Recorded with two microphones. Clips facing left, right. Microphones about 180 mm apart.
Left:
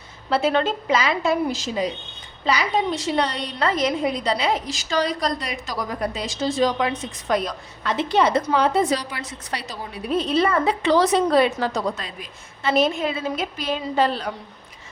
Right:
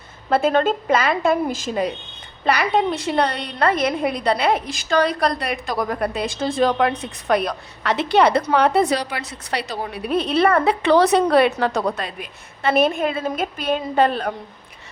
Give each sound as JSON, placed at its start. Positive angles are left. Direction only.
{"t": 0.3, "sound": "a woman's voice", "side_deg": -50}